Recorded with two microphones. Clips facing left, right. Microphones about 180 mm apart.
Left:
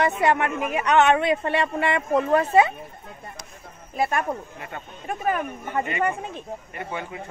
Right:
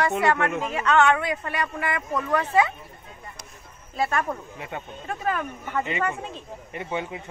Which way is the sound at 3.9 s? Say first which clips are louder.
Left 1 dB; 15° left (ahead or behind).